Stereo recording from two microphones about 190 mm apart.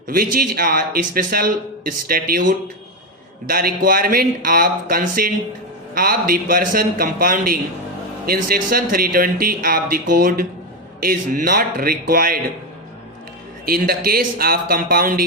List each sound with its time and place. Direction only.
0.1 s a man's voice: 50° right (ahead or behind)
3.4 s a man's voice: 50° right (ahead or behind)
13.7 s a man's voice: 50° right (ahead or behind)